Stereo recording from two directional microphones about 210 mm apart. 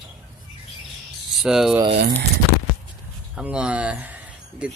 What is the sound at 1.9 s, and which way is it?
Speech, 50° right (ahead or behind).